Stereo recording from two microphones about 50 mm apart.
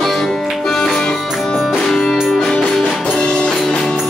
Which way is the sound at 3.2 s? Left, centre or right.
Centre.